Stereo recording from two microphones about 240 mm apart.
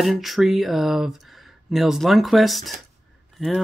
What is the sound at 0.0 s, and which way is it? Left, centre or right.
Speech, centre.